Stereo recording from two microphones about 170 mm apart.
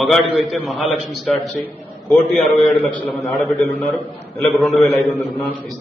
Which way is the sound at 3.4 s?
10° left (ahead or behind).